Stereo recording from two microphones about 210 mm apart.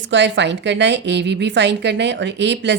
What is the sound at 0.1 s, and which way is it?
A woman's voice, 55° right (ahead or behind).